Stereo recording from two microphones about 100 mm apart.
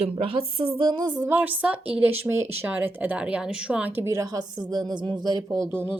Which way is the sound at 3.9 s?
25° right (ahead or behind).